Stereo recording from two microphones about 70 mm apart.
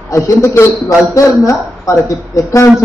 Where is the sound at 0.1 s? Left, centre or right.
Left.